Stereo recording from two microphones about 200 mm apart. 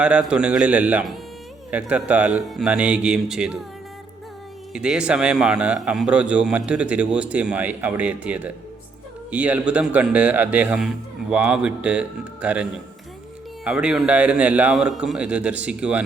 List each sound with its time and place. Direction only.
0.0 s a man's voice: 5° right (ahead or behind)
4.7 s a man's voice: 5° right (ahead or behind)